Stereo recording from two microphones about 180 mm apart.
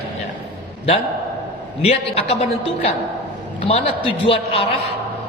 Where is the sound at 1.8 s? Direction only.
35° left (ahead or behind).